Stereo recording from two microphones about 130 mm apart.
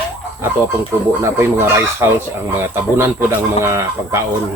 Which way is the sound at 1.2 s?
20° right (ahead or behind).